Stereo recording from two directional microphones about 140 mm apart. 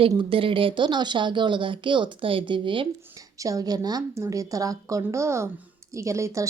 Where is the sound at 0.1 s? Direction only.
35° right (ahead or behind).